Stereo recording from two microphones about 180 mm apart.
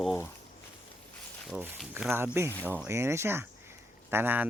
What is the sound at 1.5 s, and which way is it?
Speech, 10° right (ahead or behind).